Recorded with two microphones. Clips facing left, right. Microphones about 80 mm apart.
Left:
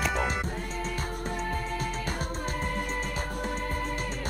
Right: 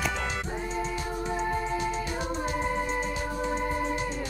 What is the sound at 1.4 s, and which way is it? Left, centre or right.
Music, centre.